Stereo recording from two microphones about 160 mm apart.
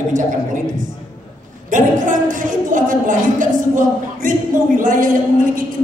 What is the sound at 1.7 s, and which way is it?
A woman's voice, 55° right (ahead or behind).